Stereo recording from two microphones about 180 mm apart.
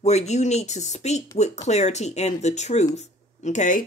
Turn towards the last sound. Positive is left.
turn(degrees=45)  # may be behind; listen again after turning